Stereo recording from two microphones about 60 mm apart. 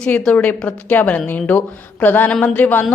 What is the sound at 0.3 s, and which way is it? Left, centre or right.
A woman's voice, centre.